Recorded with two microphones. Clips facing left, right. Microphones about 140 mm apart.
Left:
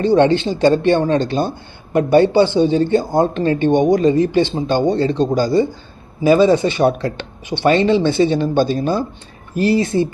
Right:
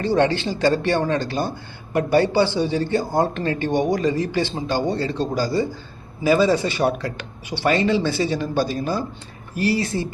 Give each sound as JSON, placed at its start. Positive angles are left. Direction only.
{"t": 0.0, "sound": "speech", "side_deg": 20}